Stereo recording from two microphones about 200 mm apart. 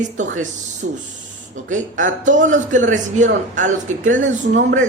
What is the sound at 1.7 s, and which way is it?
Speech, 40° right (ahead or behind).